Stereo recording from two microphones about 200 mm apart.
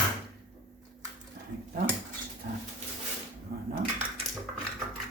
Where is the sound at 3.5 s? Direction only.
50° right (ahead or behind).